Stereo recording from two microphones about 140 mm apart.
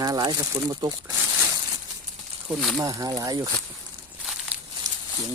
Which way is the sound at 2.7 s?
25° right (ahead or behind).